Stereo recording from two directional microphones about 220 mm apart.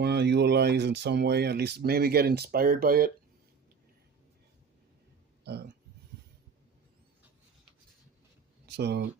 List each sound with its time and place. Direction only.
0.0 s speech: 50° right (ahead or behind)
8.6 s speech: 50° right (ahead or behind)